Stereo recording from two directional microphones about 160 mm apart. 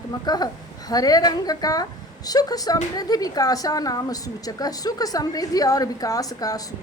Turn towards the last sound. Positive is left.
turn(degrees=25)  # may be behind; listen again after turning